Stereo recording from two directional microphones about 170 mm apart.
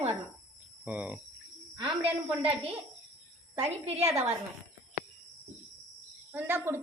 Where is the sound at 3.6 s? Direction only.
40° right (ahead or behind).